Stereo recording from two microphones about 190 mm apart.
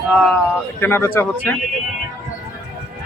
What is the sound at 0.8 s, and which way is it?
Speech, 10° left (ahead or behind).